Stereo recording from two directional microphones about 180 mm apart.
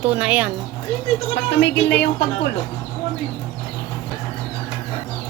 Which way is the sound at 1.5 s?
70° left (ahead or behind).